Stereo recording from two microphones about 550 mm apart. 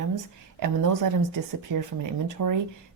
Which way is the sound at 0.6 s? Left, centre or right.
Right.